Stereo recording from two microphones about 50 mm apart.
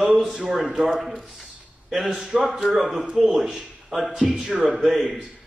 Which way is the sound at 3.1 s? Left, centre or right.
Centre.